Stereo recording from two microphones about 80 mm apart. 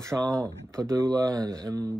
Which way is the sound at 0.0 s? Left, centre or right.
Right.